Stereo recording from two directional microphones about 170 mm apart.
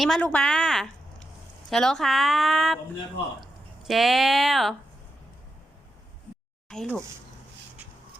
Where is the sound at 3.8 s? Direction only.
Centre (ahead or behind).